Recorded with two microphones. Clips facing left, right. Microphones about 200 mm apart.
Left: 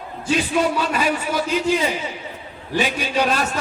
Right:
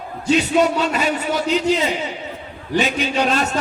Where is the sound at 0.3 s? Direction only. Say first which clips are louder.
Right 4 dB; 25° right (ahead or behind).